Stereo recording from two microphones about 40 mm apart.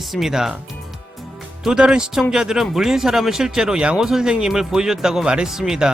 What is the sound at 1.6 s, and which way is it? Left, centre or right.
Speech, centre.